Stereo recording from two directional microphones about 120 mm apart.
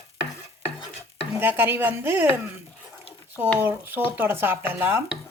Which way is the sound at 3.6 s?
15° right (ahead or behind).